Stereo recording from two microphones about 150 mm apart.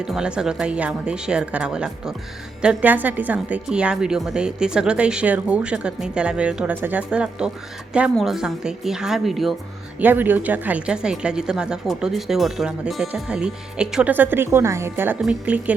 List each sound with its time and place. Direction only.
0.0 s a woman's voice: 5° right (ahead or behind)
10.0 s a woman's voice: 10° right (ahead or behind)